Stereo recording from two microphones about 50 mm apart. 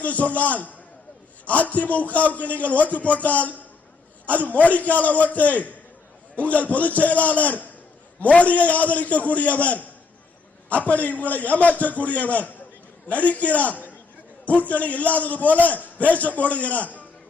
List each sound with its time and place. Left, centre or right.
0.0 s a man's voice: left